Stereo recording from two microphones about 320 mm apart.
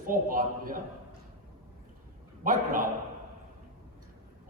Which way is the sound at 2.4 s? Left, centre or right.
Right.